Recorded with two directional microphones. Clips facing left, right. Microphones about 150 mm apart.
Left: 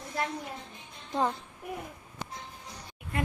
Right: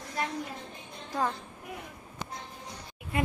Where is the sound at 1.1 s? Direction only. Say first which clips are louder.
Left 2 dB; 25° left (ahead or behind).